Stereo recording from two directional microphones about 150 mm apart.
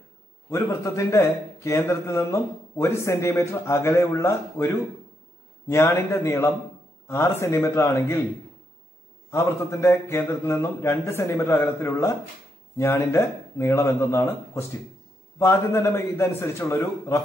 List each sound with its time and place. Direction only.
0.5 s a man's voice: 20° left (ahead or behind)
5.9 s a man's voice: 15° left (ahead or behind)
9.3 s a man's voice: 20° left (ahead or behind)